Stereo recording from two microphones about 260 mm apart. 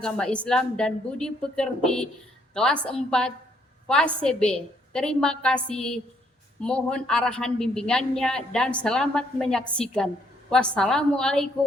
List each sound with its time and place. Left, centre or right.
0.0 s a man's voice: centre